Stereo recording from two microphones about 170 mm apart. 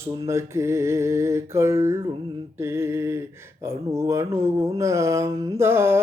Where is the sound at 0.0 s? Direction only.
15° right (ahead or behind).